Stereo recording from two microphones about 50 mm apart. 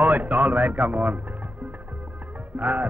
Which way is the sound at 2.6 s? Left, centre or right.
Right.